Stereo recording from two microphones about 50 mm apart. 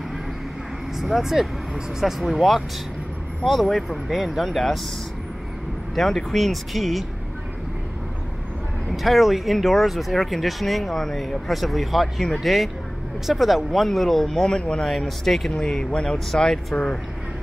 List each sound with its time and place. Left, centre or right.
0.9 s speech: centre
5.9 s speech: centre
8.9 s speech: centre
14.8 s speech: centre
15.6 s speech: centre